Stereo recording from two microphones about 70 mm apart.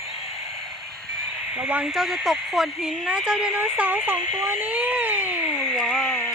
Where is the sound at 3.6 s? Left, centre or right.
Right.